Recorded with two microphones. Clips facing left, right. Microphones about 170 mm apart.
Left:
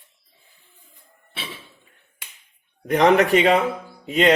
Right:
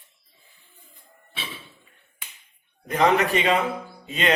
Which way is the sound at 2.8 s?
70° left (ahead or behind).